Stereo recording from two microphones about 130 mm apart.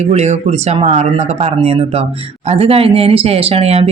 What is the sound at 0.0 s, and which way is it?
Speech, 60° right (ahead or behind).